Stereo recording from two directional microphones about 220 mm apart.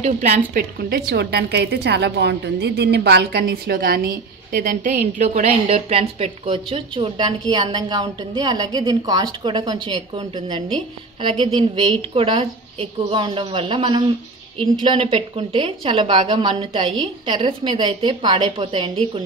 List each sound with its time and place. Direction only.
0.0 s a woman's voice: 30° right (ahead or behind)
0.6 s a woman's voice: 45° right (ahead or behind); by 10.0 s 20° right (ahead or behind)
11.2 s a woman's voice: 20° right (ahead or behind)